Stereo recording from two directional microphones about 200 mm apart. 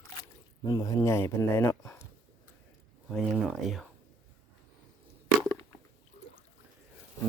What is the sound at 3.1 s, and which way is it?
Speech, centre (ahead or behind).